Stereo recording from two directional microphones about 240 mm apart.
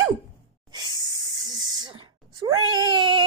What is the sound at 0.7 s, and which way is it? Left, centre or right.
Hiss, centre.